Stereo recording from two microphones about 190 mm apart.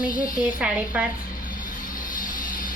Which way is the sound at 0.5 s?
5° right (ahead or behind).